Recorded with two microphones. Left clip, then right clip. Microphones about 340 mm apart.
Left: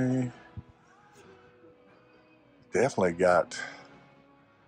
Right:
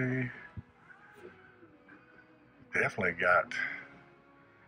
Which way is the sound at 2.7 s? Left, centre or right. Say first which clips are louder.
Left 5 dB; centre.